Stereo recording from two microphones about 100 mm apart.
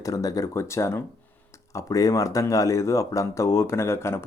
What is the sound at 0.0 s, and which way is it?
Speech, 35° left (ahead or behind).